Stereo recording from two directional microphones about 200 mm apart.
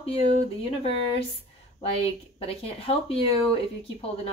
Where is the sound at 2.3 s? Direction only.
30° left (ahead or behind).